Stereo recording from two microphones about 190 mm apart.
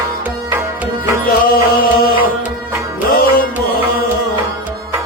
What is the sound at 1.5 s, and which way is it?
Music, 50° left (ahead or behind).